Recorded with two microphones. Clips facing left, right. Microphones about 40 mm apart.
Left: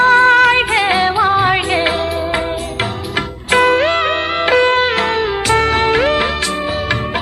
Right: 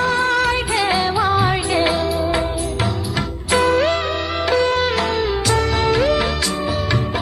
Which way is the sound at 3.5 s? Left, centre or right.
Left.